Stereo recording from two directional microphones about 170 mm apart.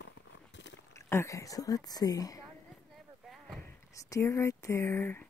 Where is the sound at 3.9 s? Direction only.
20° left (ahead or behind).